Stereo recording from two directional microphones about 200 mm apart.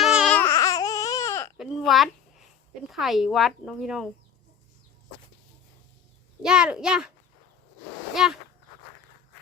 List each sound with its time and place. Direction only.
0.0 s babbling: centre (ahead or behind)
0.3 s baby cry: 15° left (ahead or behind)
1.5 s speech: centre (ahead or behind)
6.4 s speech: 5° right (ahead or behind)
8.1 s speech: centre (ahead or behind)